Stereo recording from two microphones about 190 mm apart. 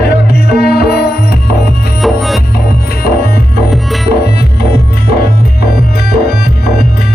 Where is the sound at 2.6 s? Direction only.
55° left (ahead or behind).